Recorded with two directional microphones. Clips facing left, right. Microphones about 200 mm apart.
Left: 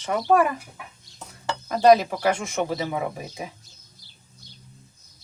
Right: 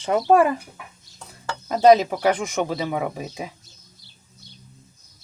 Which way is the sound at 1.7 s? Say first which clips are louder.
Right 2 dB; 20° right (ahead or behind).